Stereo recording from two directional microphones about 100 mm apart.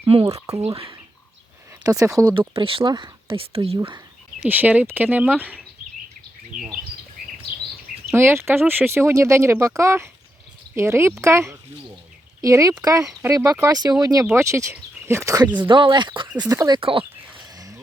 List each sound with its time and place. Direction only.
0.1 s speech: 75° right (ahead or behind)
1.8 s speech: 35° right (ahead or behind)
2.6 s speech: 60° right (ahead or behind)
2.8 s speech: 45° right (ahead or behind)
3.3 s speech: 65° right (ahead or behind)
4.4 s speech: 15° right (ahead or behind)
8.1 s speech: 25° right (ahead or behind)
15.6 s speech: 55° right (ahead or behind)
16.5 s speech: 35° right (ahead or behind)
16.7 s a sound: 60° right (ahead or behind)